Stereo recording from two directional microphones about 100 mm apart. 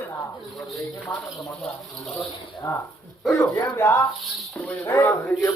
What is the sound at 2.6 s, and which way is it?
Speech, 20° left (ahead or behind).